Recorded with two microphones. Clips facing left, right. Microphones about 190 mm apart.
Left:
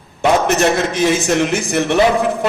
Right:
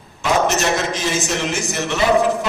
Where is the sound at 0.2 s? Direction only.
55° left (ahead or behind).